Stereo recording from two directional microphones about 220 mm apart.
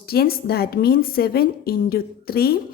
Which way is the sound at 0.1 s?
45° left (ahead or behind).